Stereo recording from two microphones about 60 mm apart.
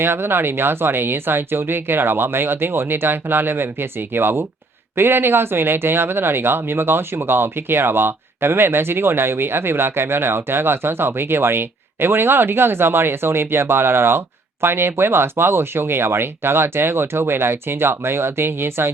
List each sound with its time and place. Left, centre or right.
0.0 s speech: right